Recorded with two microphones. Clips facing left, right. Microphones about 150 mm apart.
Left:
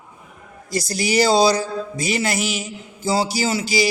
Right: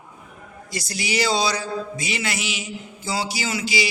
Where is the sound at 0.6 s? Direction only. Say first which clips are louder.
Left 7 dB; 40° left (ahead or behind).